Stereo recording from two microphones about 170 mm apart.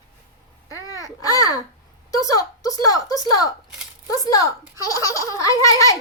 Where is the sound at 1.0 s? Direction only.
20° left (ahead or behind).